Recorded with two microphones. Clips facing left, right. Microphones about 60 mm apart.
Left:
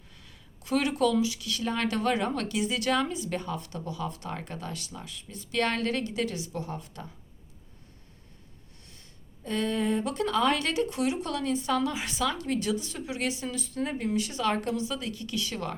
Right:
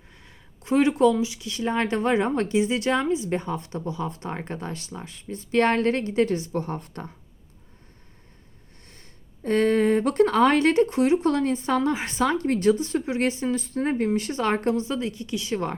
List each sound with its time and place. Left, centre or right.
0.1 s speech: right
8.9 s speech: right